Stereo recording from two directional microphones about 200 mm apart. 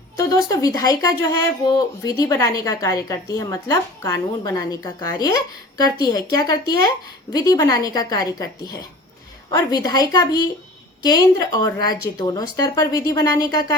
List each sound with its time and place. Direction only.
0.2 s speech: 20° left (ahead or behind)